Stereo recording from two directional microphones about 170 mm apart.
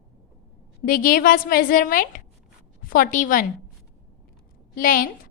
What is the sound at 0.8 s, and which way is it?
A woman's voice, 55° left (ahead or behind).